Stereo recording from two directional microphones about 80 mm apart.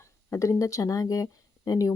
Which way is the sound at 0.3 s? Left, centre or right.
Left.